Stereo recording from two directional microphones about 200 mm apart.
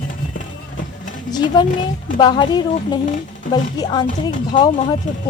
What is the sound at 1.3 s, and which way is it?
A woman's voice, 20° left (ahead or behind).